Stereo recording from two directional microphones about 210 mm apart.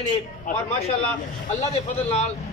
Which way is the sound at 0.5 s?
40° left (ahead or behind).